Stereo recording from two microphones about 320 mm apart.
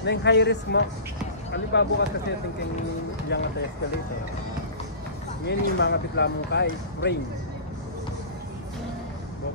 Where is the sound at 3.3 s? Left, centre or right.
Left.